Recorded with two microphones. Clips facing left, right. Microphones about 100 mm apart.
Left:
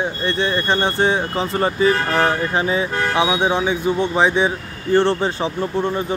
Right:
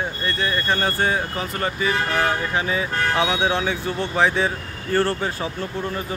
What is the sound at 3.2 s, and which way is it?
Speech, 15° left (ahead or behind).